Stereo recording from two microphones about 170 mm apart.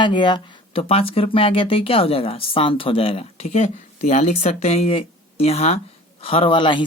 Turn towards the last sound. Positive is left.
turn(degrees=30)  # may be behind; listen again after turning